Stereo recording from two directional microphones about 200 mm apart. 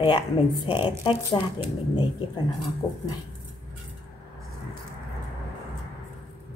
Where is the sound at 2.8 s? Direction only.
30° left (ahead or behind).